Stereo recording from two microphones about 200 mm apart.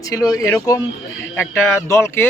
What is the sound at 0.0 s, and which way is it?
A man's voice, 15° left (ahead or behind).